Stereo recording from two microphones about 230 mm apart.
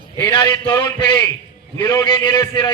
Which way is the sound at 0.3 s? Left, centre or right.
Centre.